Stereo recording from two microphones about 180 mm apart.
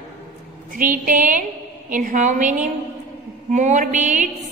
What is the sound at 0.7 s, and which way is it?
A woman's voice, 50° right (ahead or behind).